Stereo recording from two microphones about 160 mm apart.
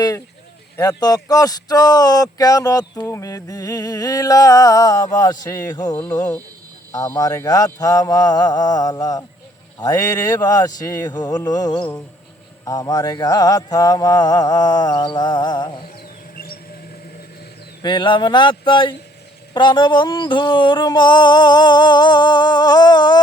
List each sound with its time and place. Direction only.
0.8 s speech: 25° left (ahead or behind)
16.3 s mouse: 70° left (ahead or behind)
17.8 s speech: 30° left (ahead or behind)